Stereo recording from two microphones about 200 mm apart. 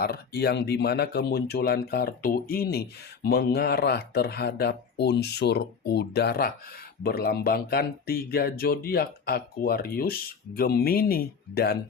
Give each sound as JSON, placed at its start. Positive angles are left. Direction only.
{"t": 0.0, "sound": "speech", "side_deg": 50}